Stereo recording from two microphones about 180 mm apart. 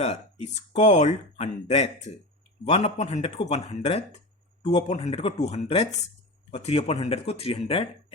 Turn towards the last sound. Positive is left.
turn(degrees=30)  # may be behind; listen again after turning